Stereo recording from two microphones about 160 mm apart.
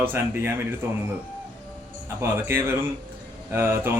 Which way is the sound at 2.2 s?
15° right (ahead or behind).